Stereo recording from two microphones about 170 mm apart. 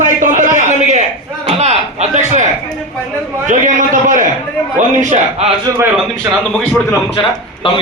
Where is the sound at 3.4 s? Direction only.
50° right (ahead or behind).